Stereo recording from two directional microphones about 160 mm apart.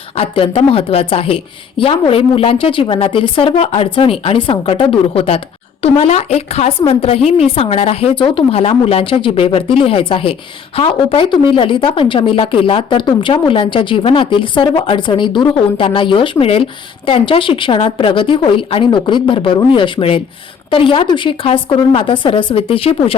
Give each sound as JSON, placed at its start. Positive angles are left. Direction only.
{"t": 0.2, "sound": "a woman's voice", "side_deg": 35}